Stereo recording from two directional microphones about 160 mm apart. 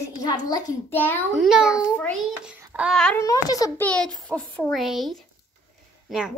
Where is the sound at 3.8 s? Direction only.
5° left (ahead or behind).